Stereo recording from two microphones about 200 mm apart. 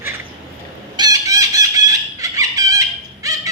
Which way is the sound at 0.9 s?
20° right (ahead or behind).